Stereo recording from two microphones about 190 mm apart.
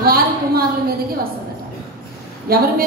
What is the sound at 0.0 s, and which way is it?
Speech, 50° right (ahead or behind).